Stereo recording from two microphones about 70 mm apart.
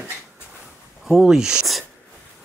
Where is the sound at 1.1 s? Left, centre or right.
Centre.